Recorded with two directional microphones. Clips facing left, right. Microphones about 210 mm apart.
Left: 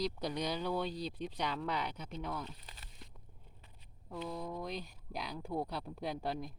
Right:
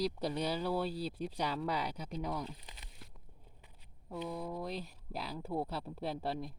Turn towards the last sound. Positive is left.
turn(degrees=0)  # may be behind; listen again after turning